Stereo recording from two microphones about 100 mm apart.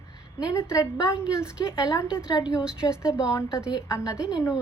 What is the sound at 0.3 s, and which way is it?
Speech, 30° left (ahead or behind).